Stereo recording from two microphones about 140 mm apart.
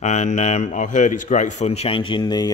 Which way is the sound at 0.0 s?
55° left (ahead or behind).